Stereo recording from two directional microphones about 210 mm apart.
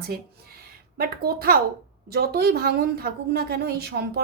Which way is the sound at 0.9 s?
45° right (ahead or behind).